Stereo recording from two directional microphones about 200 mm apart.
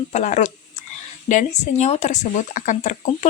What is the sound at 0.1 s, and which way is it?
Speech, 35° left (ahead or behind).